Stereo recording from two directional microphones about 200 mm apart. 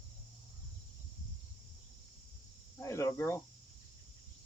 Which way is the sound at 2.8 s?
15° left (ahead or behind).